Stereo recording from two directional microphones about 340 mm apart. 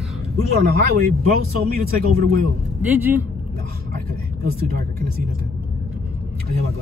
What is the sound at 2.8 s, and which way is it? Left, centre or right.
Speech, centre.